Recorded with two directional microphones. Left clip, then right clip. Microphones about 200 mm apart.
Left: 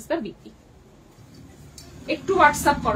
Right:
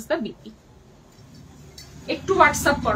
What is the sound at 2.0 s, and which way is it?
Speech, 10° right (ahead or behind).